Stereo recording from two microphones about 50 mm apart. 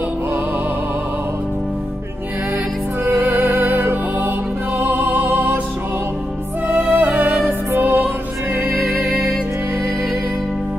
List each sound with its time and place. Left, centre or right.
3.1 s music: right
4.7 s music: right
6.7 s music: right